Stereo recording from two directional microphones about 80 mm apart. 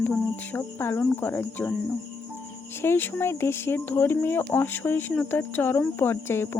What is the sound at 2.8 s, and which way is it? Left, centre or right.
Speech, left.